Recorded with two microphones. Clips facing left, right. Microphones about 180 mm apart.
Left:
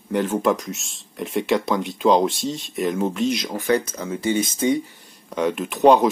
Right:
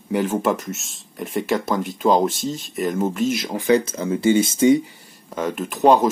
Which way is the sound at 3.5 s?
20° right (ahead or behind).